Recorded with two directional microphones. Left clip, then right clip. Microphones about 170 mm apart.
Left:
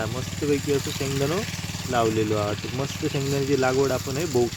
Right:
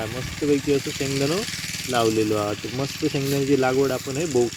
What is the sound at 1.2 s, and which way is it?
Speech, 35° right (ahead or behind).